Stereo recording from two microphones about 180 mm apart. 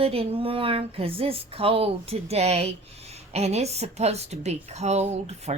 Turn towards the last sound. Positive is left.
turn(degrees=-35)  # may be behind; listen again after turning